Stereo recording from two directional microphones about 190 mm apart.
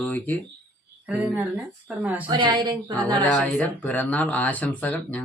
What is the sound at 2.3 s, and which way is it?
Speech, 25° right (ahead or behind).